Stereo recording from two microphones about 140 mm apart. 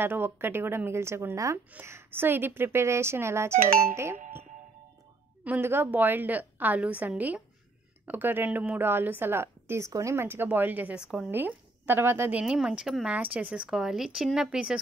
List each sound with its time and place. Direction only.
0.0 s a woman's voice: 15° right (ahead or behind)
5.4 s a woman's voice: 15° right (ahead or behind)